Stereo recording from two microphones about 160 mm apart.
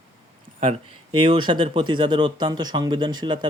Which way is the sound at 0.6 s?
35° right (ahead or behind).